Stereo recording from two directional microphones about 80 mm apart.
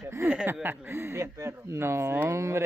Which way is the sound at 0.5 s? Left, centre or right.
Right.